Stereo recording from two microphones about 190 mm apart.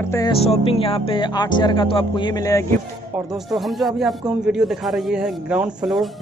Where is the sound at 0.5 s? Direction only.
30° left (ahead or behind).